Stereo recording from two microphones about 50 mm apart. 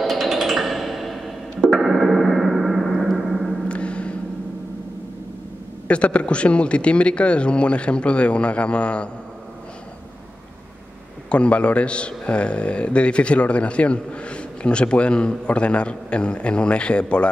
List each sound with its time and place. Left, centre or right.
0.0 s music: centre
1.7 s gong: centre
3.6 s gong: left
5.9 s a man's voice: left
11.2 s a man's voice: left